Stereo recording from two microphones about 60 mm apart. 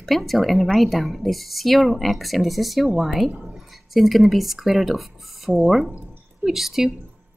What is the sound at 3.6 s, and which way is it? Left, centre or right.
Speech, centre.